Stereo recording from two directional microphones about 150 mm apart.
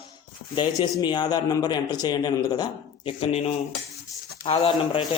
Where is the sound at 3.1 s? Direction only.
40° left (ahead or behind).